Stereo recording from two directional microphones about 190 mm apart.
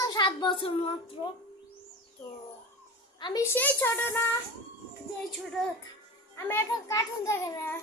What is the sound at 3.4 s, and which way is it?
Speech, 10° left (ahead or behind).